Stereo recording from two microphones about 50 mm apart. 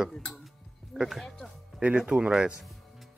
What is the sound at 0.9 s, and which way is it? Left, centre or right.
Music, centre.